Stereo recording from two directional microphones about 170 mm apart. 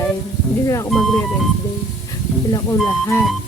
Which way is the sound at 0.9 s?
5° left (ahead or behind).